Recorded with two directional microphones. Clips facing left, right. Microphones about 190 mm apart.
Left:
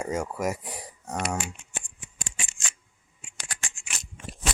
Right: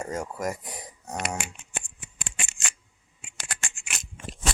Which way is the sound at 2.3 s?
60° right (ahead or behind).